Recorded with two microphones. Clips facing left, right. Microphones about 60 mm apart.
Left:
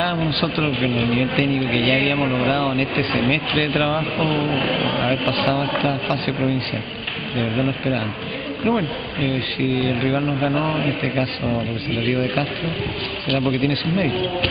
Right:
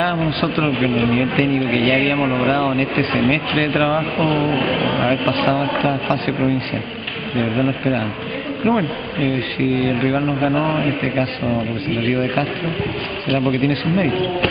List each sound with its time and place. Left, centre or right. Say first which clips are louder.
0.8 s speech: right 3 dB; centre
3.1 s speech: right 3 dB; centre
13.6 s speech: right 3 dB; centre
14.0 s speech: right 3 dB; centre